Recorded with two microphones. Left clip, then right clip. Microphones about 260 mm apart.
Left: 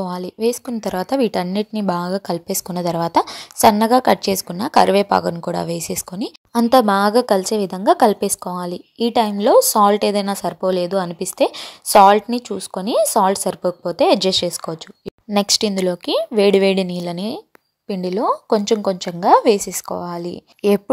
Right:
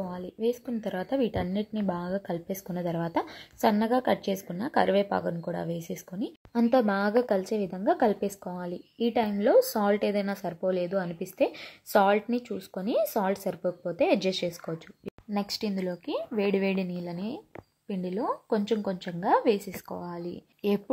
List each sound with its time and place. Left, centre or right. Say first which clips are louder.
0.0 s a woman's voice: left 10 dB; left